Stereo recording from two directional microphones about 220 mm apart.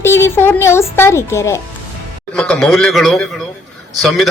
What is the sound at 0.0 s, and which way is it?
A man's voice, 10° left (ahead or behind).